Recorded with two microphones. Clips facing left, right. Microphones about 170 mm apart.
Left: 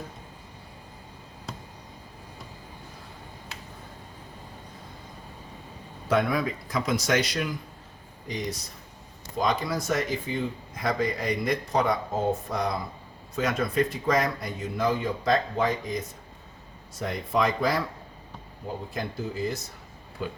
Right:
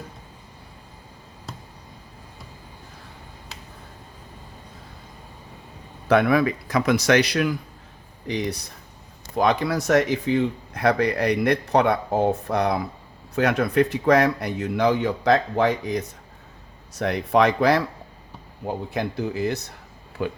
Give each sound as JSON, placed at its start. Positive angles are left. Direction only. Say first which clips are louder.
{"t": 6.1, "sound": "speech", "louder": "right 6 dB", "side_deg": -65}
{"t": 9.3, "sound": "speech", "louder": "right 6 dB", "side_deg": -65}